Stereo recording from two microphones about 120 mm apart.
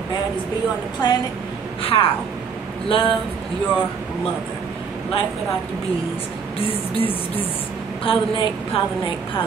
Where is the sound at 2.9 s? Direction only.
45° left (ahead or behind).